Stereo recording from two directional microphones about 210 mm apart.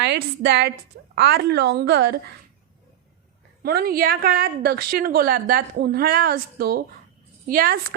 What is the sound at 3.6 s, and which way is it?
A woman's voice, 45° right (ahead or behind).